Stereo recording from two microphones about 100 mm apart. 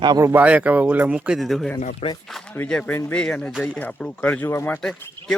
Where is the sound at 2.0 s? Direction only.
85° left.